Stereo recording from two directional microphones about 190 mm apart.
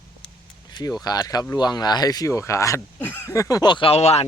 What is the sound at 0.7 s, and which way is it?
Speech, 20° left (ahead or behind).